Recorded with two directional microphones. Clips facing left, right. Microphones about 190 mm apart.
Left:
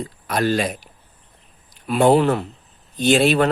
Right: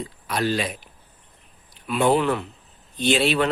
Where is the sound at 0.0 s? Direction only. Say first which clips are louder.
Left 4 dB; 45° left (ahead or behind).